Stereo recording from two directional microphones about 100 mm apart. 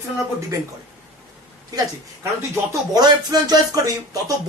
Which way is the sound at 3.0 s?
40° right (ahead or behind).